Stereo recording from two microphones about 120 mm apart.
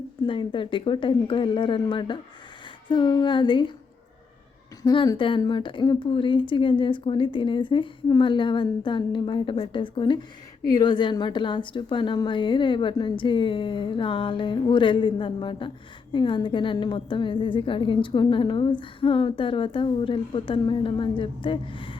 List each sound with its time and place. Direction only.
0.3 s a woman's voice: 45° left (ahead or behind)
2.9 s a sound: 40° left (ahead or behind)
4.8 s a woman's voice: 35° left (ahead or behind)